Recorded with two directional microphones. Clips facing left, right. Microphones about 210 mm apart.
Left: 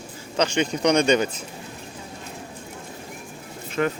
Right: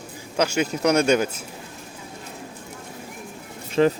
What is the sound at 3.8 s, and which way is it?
Speech, 25° right (ahead or behind).